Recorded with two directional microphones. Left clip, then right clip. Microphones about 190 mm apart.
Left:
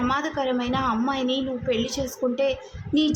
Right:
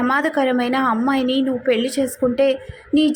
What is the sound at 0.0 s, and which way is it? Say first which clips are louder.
A woman's voice: right 7 dB; 20° right (ahead or behind).